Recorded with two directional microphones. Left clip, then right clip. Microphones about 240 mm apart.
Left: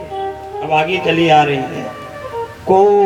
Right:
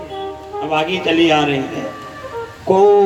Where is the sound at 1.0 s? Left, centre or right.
Centre.